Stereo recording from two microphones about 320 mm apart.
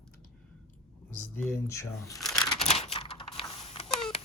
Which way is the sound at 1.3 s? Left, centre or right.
Centre.